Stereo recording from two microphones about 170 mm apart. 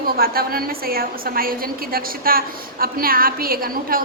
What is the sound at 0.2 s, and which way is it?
A woman's voice, 60° right (ahead or behind).